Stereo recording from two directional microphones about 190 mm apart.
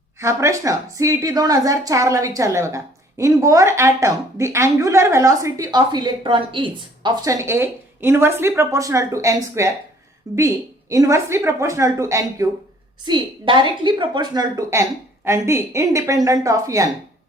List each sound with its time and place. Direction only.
0.2 s a woman's voice: 15° right (ahead or behind)